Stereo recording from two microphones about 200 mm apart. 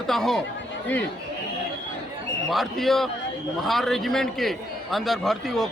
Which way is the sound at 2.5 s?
Centre (ahead or behind).